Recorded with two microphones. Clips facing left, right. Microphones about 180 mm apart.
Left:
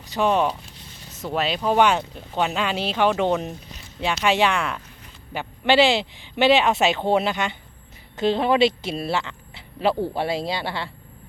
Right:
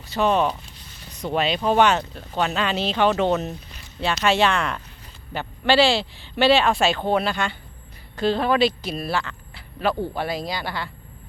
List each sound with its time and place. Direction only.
0.0 s speech: 15° left (ahead or behind)
1.1 s speech: 5° left (ahead or behind); by 10.9 s 25° left (ahead or behind)